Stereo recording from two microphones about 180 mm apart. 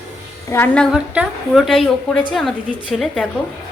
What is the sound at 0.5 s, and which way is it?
Speech, 10° left (ahead or behind).